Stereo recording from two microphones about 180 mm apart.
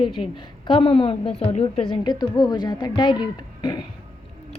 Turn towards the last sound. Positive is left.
turn(degrees=25)  # may be behind; listen again after turning